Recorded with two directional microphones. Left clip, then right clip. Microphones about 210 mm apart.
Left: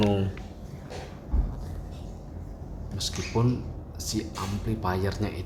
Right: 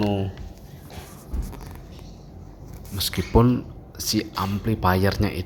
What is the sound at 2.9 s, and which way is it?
Speech, 30° right (ahead or behind).